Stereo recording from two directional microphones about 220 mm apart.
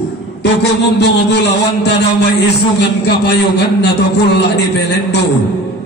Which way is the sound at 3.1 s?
50° left (ahead or behind).